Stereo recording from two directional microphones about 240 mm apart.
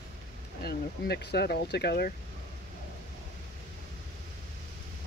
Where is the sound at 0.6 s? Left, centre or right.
Left.